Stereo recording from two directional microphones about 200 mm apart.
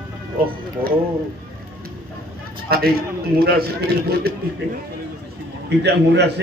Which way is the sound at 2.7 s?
50° right (ahead or behind).